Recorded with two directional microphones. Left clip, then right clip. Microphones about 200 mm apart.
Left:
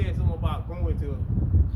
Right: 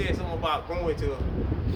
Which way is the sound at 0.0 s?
Centre (ahead or behind).